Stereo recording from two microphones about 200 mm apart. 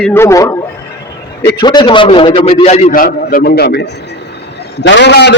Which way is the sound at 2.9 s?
45° left (ahead or behind).